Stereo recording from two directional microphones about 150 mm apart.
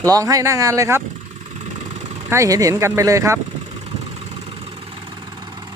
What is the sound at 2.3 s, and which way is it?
Speech, 20° right (ahead or behind).